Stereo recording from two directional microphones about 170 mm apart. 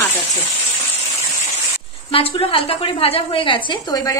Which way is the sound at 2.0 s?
30° left (ahead or behind).